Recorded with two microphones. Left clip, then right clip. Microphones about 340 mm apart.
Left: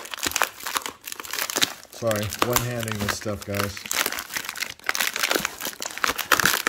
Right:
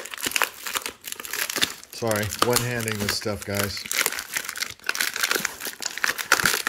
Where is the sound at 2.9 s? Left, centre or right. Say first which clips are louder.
Right 1 dB; centre.